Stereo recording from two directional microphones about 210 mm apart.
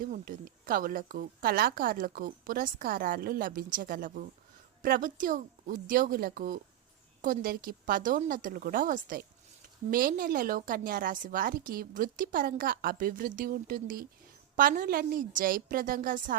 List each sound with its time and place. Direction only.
0.0 s a woman's voice: 40° right (ahead or behind)